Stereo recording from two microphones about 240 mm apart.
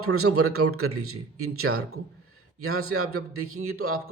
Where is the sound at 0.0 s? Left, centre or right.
Right.